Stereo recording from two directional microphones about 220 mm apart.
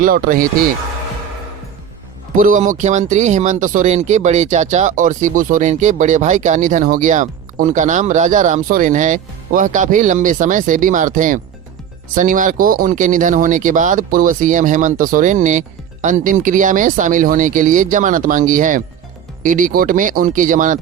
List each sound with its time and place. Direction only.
0.0 s speech: 40° right (ahead or behind)
2.3 s speech: 35° right (ahead or behind)